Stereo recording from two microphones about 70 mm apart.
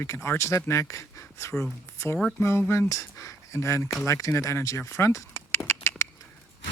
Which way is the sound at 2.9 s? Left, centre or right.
Left.